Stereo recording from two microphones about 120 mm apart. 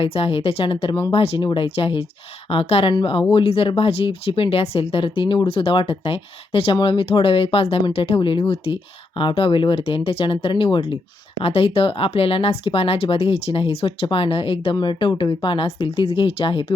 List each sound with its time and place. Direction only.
0.0 s speech: 50° left (ahead or behind)
2.9 s speech: 45° left (ahead or behind)